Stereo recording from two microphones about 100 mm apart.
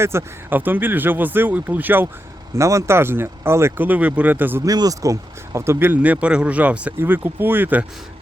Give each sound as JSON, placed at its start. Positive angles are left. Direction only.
{"t": 0.0, "sound": "speech", "side_deg": -25}
{"t": 2.6, "sound": "speech", "side_deg": -30}
{"t": 4.6, "sound": "speech", "side_deg": -40}
{"t": 5.5, "sound": "speech", "side_deg": -25}